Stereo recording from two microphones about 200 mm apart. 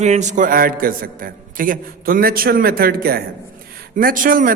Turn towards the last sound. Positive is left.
turn(degrees=-45)  # may be behind; listen again after turning